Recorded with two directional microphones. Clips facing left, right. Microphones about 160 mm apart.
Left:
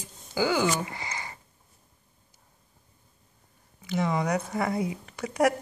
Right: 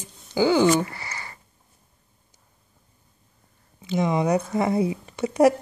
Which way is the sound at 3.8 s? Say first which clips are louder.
Right 5 dB; 20° right (ahead or behind).